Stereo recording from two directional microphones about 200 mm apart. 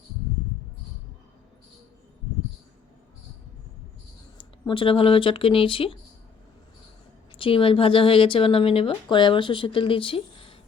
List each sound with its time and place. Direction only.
4.4 s speech: 25° left (ahead or behind)
7.3 s speech: 25° left (ahead or behind)